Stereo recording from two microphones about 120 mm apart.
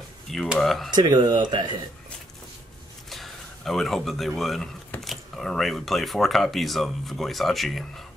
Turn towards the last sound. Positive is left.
turn(degrees=0)  # may be behind; listen again after turning